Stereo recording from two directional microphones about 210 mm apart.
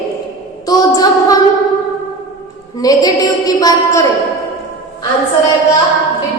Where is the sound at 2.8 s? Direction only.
15° left (ahead or behind).